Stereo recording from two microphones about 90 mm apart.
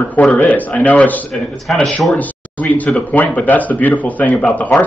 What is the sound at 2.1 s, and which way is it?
A man's voice, 15° left (ahead or behind).